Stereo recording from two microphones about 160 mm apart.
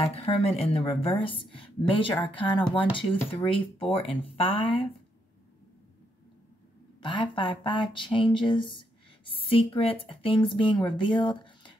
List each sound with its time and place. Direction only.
0.0 s a woman's voice: 35° left (ahead or behind)
7.0 s speech: 30° left (ahead or behind)